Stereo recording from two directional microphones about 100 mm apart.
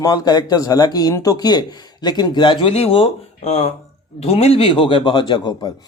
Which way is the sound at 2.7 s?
80° left.